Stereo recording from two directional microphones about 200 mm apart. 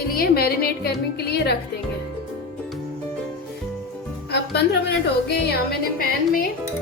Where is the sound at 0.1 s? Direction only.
50° left (ahead or behind).